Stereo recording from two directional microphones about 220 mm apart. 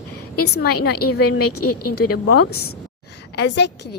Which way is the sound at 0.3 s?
45° left (ahead or behind).